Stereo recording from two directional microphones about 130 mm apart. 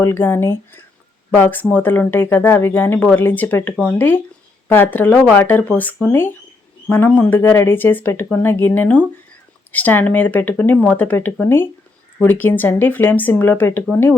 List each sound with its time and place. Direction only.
0.0 s speech: 15° left (ahead or behind)